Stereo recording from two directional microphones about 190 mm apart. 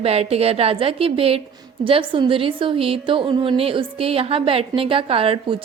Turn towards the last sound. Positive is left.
turn(degrees=-30)  # may be behind; listen again after turning